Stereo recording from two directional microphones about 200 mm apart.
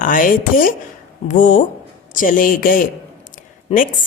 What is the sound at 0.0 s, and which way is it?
Speech, 45° left (ahead or behind).